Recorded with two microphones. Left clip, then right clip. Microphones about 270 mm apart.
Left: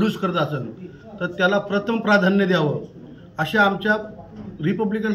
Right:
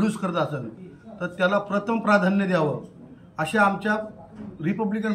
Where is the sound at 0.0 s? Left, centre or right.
Centre.